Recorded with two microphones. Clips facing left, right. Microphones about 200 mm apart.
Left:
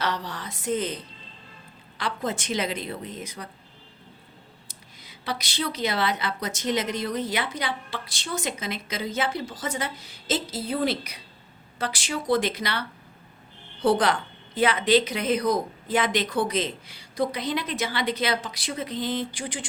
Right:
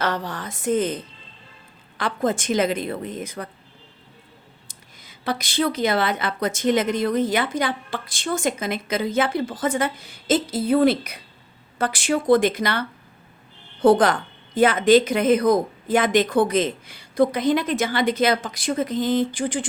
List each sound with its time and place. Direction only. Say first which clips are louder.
0.0 s a woman's voice: right 4 dB; 50° right (ahead or behind)
2.0 s a woman's voice: right 6 dB; 50° right (ahead or behind)
4.7 s a woman's voice: even; 50° right (ahead or behind)
13.8 s a woman's voice: right 6 dB; 50° right (ahead or behind)